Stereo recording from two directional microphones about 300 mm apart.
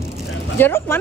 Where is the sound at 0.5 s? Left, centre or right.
Centre.